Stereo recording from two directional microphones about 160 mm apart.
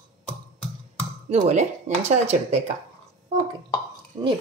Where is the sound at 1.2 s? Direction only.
45° right (ahead or behind).